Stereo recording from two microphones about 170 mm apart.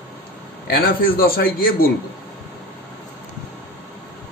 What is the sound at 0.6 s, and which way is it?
A man's voice, 60° left (ahead or behind).